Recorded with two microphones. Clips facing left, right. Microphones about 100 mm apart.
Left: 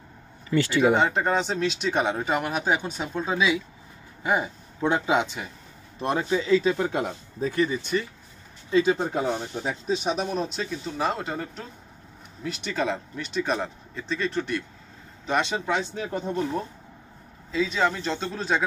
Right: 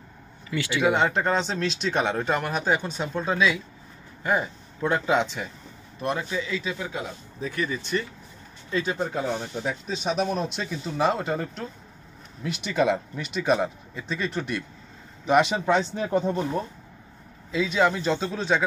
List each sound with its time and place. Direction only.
0.5 s speech: 35° left (ahead or behind)
0.9 s speech: 5° left (ahead or behind)
5.9 s speech: 30° left (ahead or behind); by 7.2 s 55° left (ahead or behind)
7.3 s speech: 30° left (ahead or behind)
10.0 s speech: centre (ahead or behind)
17.5 s speech: 5° right (ahead or behind)